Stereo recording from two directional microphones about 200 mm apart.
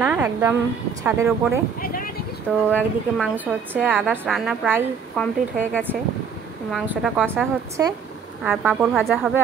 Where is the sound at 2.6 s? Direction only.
5° left (ahead or behind).